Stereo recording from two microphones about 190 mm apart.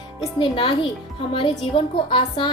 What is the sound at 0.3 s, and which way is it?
A woman's voice, 25° left (ahead or behind).